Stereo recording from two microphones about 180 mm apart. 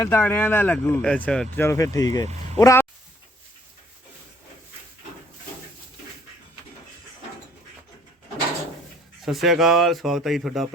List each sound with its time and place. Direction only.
0.0 s speech: 10° left (ahead or behind)
9.2 s speech: centre (ahead or behind)